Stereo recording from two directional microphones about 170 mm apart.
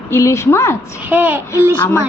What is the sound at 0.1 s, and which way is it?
Speech, 15° left (ahead or behind).